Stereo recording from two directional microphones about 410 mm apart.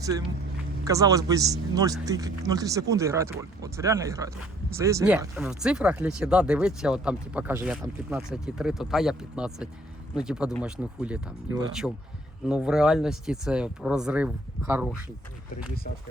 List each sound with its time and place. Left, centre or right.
0.9 s speech: centre